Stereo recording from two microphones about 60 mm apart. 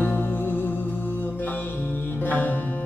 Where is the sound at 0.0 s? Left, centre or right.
Left.